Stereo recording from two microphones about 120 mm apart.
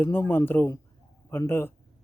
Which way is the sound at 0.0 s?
20° left (ahead or behind).